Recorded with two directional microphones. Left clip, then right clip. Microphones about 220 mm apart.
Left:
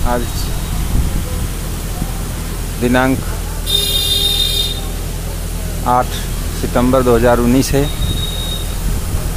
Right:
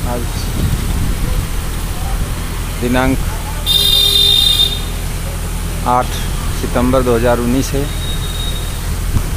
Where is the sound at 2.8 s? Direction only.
5° left (ahead or behind).